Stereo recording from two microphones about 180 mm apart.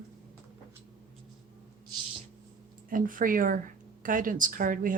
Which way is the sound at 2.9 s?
50° right (ahead or behind).